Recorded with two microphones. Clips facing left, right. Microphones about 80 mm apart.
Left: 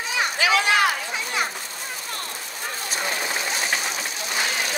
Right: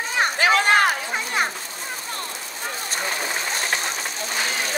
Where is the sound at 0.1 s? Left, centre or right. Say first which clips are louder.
Right 2 dB; right.